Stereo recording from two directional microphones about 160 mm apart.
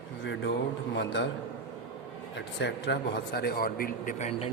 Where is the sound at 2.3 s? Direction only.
90° left; by 4.3 s 60° left (ahead or behind).